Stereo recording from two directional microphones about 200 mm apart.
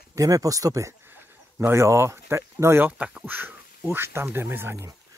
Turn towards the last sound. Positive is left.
turn(degrees=-15)  # may be behind; listen again after turning